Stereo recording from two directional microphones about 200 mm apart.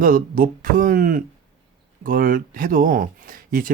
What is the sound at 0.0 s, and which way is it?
Speech, 45° right (ahead or behind).